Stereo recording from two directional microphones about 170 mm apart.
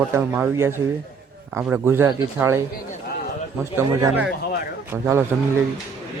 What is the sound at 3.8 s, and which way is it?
A man's voice, 15° right (ahead or behind).